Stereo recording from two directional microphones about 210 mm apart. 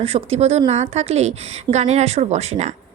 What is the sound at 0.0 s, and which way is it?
A woman's voice, 30° right (ahead or behind).